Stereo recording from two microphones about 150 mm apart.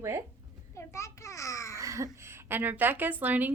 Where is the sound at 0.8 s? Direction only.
20° left (ahead or behind).